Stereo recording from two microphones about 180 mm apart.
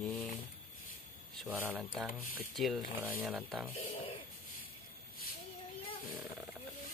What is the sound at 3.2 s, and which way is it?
Speech, 5° right (ahead or behind).